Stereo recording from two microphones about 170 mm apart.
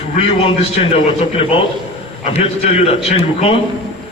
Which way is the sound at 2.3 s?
35° left (ahead or behind).